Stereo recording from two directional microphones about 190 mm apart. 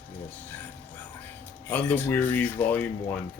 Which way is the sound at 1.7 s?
10° left (ahead or behind).